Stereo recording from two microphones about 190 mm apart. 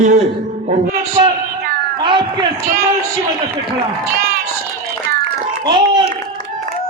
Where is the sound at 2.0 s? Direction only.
25° right (ahead or behind).